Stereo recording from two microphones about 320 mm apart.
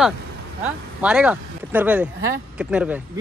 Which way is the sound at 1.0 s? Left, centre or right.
Centre.